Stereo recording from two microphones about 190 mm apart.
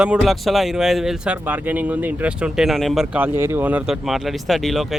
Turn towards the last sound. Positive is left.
turn(degrees=0)  # may be behind; listen again after turning